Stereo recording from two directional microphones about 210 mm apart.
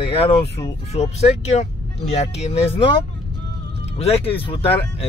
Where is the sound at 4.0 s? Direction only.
30° left (ahead or behind).